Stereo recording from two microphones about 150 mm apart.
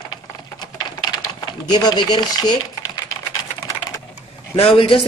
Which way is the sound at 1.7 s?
30° left (ahead or behind).